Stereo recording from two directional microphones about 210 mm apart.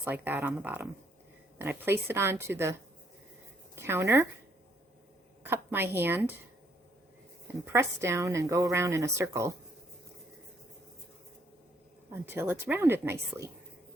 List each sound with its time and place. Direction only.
0.0 s a woman's voice: 10° right (ahead or behind)
3.8 s a woman's voice: 10° right (ahead or behind)
5.4 s a woman's voice: 10° right (ahead or behind)
7.6 s a woman's voice: 10° right (ahead or behind)
12.1 s a woman's voice: 10° right (ahead or behind)